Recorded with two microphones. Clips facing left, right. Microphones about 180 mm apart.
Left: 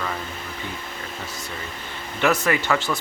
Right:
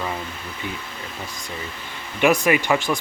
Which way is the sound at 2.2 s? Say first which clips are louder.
Right 3 dB; 15° right (ahead or behind).